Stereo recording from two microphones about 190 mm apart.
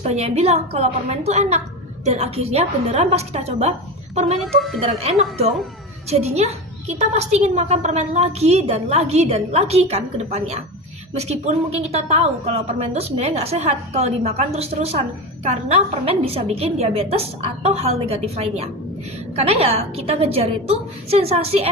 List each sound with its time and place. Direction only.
0.0 s a woman's voice: 35° right (ahead or behind)
4.4 s a woman's voice: centre (ahead or behind)
4.8 s a woman's voice: 35° right (ahead or behind)